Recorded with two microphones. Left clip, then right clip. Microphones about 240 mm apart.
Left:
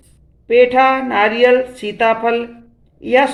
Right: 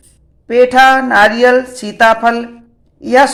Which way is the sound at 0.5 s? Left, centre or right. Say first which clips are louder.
Right 4 dB; right.